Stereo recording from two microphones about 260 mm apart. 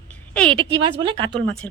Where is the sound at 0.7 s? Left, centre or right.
Centre.